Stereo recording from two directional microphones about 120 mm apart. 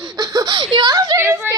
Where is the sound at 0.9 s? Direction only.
25° right (ahead or behind).